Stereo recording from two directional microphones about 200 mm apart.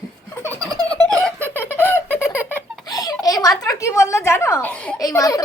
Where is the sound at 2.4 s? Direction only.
15° left (ahead or behind).